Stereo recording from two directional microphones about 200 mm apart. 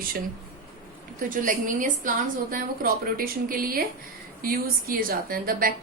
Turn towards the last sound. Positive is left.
turn(degrees=-45)  # may be behind; listen again after turning